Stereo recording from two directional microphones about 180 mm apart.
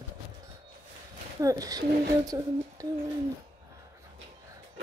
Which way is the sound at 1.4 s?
20° right (ahead or behind).